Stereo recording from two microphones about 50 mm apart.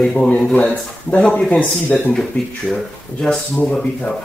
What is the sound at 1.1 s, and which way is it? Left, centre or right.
Speech, left.